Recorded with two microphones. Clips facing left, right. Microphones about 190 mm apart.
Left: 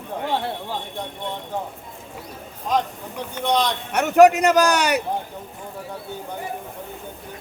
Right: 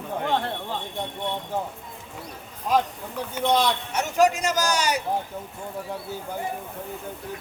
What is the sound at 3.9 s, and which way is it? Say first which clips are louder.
A man's voice: left 9 dB; 65° left (ahead or behind).